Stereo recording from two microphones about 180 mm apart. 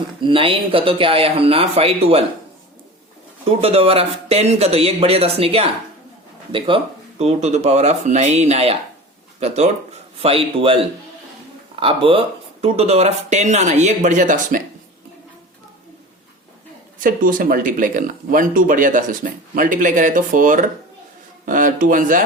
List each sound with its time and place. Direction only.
0.2 s speech: 30° right (ahead or behind)
3.6 s speech: 35° right (ahead or behind)
11.8 s speech: 30° right (ahead or behind)
17.0 s speech: 50° right (ahead or behind)